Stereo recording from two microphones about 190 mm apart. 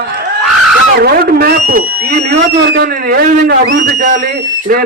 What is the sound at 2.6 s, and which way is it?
Speech, 65° right (ahead or behind).